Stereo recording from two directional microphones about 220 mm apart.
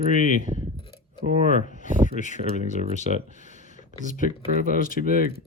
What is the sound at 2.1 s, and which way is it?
Speech, 35° left (ahead or behind).